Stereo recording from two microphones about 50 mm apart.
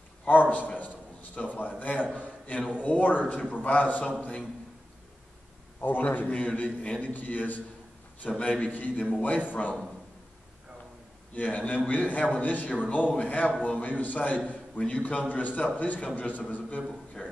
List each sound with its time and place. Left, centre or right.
0.3 s a man's voice: left
0.7 s a sound: left
1.8 s a man's voice: left
5.8 s a man's voice: left
11.3 s a man's voice: left